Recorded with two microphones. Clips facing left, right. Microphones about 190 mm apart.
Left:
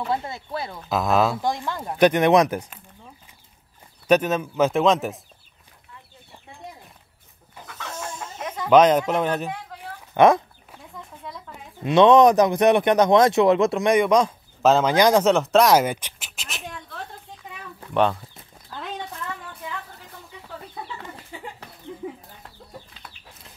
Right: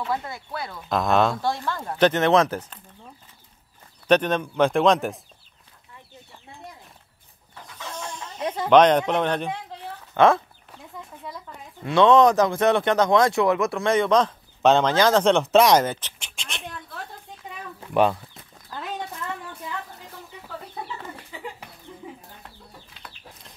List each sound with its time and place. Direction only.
0.0 s speech: 25° left (ahead or behind)
0.8 s speech: 5° left (ahead or behind)
1.4 s speech: 15° left (ahead or behind)
4.1 s speech: 5° left (ahead or behind)
7.6 s chicken: 65° left (ahead or behind)
8.6 s speech: 5° left (ahead or behind)
9.9 s a sound: 15° left (ahead or behind)
11.2 s a sound: centre (ahead or behind)
11.8 s speech: 20° left (ahead or behind); by 16.6 s 5° left (ahead or behind)
17.7 s a sound: 10° right (ahead or behind)